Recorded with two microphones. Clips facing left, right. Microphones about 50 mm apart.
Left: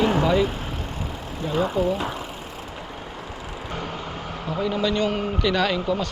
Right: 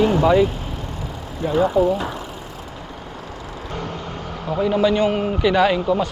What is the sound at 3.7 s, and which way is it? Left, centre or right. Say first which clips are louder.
Vehicle: right 2 dB; centre.